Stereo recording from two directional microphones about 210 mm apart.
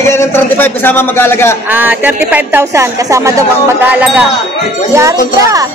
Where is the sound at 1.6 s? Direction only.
10° right (ahead or behind).